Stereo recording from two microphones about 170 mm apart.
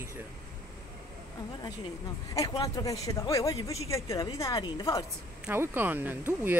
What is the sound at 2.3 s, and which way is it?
A woman's voice, 20° left (ahead or behind).